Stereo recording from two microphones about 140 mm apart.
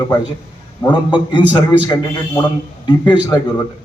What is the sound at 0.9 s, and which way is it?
A man's voice, 35° left (ahead or behind).